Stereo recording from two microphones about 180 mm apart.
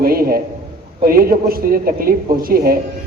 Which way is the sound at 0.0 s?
55° right (ahead or behind).